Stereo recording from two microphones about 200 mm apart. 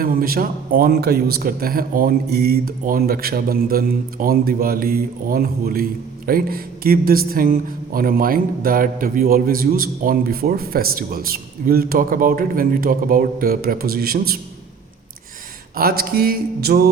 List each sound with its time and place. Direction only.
0.0 s a man's voice: 45° right (ahead or behind)
15.7 s a man's voice: 50° right (ahead or behind)